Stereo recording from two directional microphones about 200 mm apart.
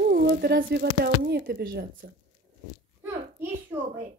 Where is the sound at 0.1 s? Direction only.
50° right (ahead or behind).